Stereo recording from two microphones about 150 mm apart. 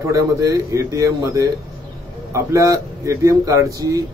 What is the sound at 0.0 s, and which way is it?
Speech, 20° right (ahead or behind).